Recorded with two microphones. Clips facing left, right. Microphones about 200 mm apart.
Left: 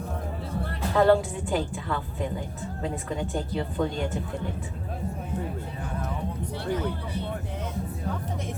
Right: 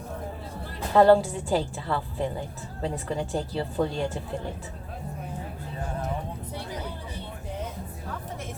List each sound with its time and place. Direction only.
0.9 s speech: 30° right (ahead or behind)